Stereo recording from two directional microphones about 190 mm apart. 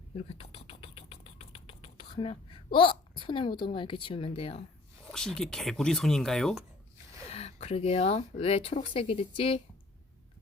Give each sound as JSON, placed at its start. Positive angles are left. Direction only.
{"t": 0.2, "sound": "speech", "side_deg": 30}
{"t": 5.1, "sound": "speech", "side_deg": 5}
{"t": 7.3, "sound": "speech", "side_deg": 35}